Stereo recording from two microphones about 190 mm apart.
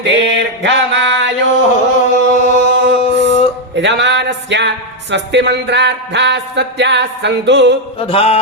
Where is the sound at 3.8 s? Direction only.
70° right (ahead or behind).